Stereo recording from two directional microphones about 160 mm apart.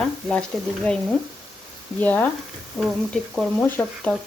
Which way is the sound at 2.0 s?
10° left (ahead or behind).